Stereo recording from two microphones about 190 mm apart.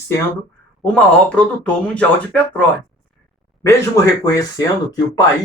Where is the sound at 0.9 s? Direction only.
5° left (ahead or behind).